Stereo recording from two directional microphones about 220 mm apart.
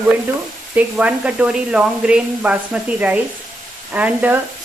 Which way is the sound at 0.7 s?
5° right (ahead or behind).